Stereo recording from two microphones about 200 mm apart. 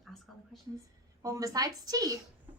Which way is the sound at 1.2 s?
15° right (ahead or behind).